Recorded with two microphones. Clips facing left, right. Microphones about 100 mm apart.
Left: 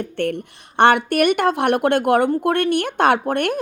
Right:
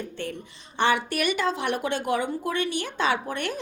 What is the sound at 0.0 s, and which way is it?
Speech, 65° left (ahead or behind).